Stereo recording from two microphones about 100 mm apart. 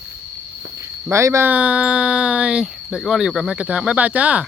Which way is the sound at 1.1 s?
25° right (ahead or behind).